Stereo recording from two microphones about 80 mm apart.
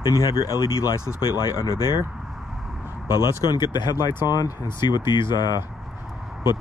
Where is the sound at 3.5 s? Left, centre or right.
Left.